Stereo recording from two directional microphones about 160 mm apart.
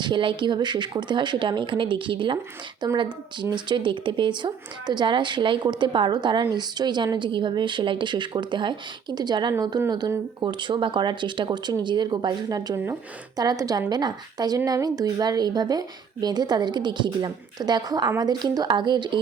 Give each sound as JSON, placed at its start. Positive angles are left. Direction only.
{"t": 0.0, "sound": "speech", "side_deg": -30}